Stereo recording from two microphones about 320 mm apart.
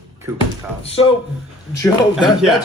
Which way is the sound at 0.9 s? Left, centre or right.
Centre.